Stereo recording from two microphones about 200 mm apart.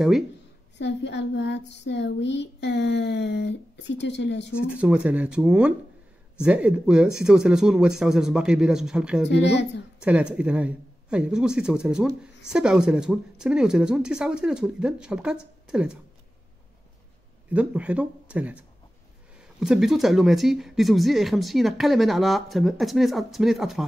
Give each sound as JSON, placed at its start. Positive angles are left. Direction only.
{"t": 0.7, "sound": "speech", "side_deg": 60}
{"t": 4.6, "sound": "speech", "side_deg": -5}
{"t": 9.3, "sound": "speech", "side_deg": 60}
{"t": 9.9, "sound": "speech", "side_deg": -5}
{"t": 17.5, "sound": "speech", "side_deg": -5}